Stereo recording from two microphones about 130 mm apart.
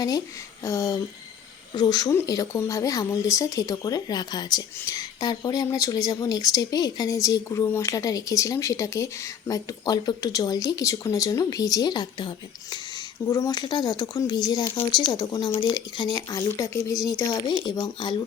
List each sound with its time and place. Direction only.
0.6 s speech: 25° left (ahead or behind)
17.6 s speech: 35° left (ahead or behind)